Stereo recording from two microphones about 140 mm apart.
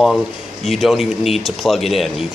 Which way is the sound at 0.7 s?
Centre (ahead or behind).